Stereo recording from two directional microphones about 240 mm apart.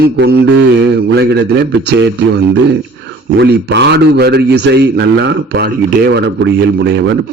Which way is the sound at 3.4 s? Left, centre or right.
Right.